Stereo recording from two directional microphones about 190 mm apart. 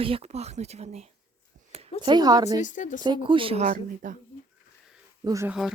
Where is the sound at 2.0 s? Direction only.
20° right (ahead or behind).